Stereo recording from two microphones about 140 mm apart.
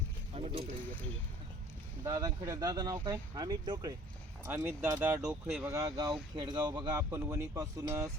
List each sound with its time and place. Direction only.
0.3 s a sound: 45° right (ahead or behind)
2.0 s speech: 25° right (ahead or behind)
4.4 s speech: 15° right (ahead or behind)
5.3 s speech: 5° right (ahead or behind)
5.7 s speech: 25° right (ahead or behind)